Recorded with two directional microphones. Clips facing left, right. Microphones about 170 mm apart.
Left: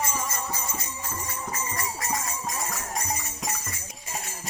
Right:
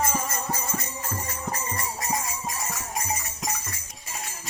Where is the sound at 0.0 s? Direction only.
50° right (ahead or behind).